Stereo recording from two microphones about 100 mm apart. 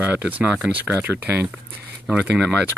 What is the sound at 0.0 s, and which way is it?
Speech, 15° right (ahead or behind).